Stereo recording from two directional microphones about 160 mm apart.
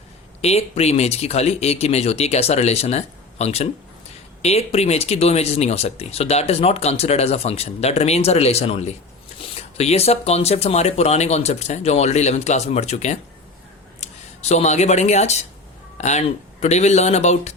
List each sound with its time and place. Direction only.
0.4 s speech: 40° left (ahead or behind)